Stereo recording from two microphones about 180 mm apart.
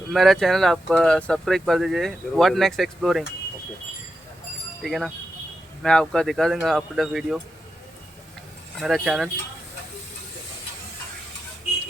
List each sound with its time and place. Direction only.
0.1 s speech: centre (ahead or behind)
4.8 s speech: centre (ahead or behind)
8.8 s speech: centre (ahead or behind)